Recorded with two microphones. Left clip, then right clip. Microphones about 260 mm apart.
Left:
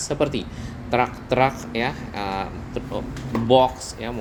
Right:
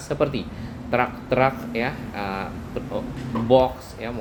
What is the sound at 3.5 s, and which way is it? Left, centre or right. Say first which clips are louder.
Speech: left 1 dB; left.